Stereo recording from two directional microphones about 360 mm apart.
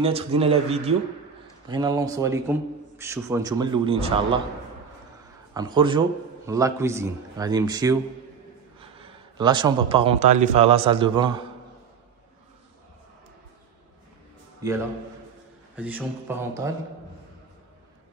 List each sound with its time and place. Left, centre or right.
0.0 s a man's voice: centre
5.5 s a man's voice: centre
9.4 s a man's voice: centre
15.7 s speech: centre